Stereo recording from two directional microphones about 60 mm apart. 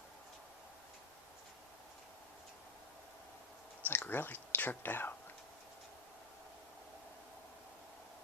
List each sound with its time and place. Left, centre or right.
3.8 s speech: left